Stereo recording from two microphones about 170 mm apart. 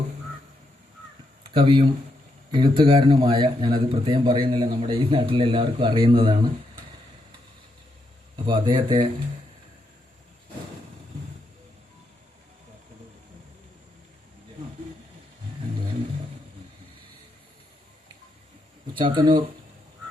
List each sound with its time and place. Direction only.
1.5 s a man's voice: 30° right (ahead or behind)
8.4 s a man's voice: 30° right (ahead or behind)
18.9 s a man's voice: 30° right (ahead or behind)